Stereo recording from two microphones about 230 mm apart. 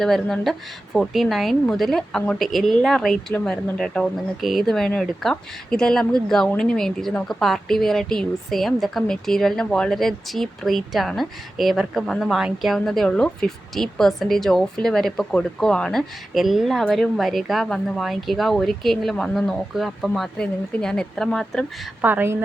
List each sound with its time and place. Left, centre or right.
0.0 s speech: centre
22.1 s a woman's voice: centre